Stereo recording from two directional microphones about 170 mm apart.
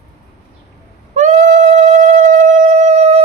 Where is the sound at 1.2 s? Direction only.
45° right (ahead or behind).